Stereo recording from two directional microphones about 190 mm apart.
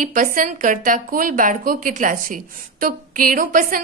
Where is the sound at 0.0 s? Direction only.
45° right (ahead or behind).